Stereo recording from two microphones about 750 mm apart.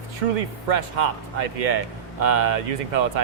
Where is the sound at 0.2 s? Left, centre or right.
Right.